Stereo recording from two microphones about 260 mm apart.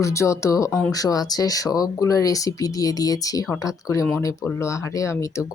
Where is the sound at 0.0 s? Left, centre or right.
Centre.